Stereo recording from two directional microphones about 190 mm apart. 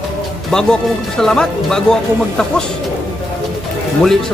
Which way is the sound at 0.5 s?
5° left (ahead or behind).